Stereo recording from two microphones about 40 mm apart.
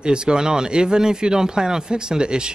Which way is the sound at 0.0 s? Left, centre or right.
Right.